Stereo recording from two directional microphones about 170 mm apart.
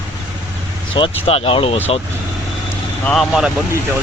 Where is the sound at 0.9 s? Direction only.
30° left (ahead or behind).